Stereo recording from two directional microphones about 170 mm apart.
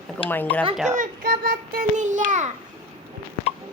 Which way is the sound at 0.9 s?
50° right (ahead or behind).